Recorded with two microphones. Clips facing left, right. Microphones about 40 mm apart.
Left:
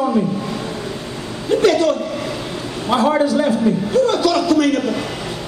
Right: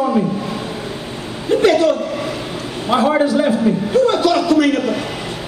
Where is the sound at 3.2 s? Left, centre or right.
Centre.